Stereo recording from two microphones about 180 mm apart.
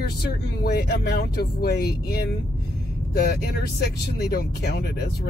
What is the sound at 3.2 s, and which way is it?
Speech, 60° left (ahead or behind).